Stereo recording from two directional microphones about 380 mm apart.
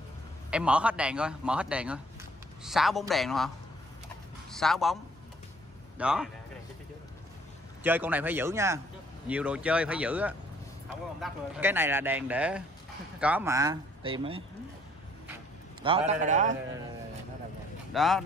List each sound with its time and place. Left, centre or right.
0.5 s a man's voice: centre
5.9 s a man's voice: centre
7.8 s a man's voice: centre
15.8 s a man's voice: centre
17.9 s a man's voice: centre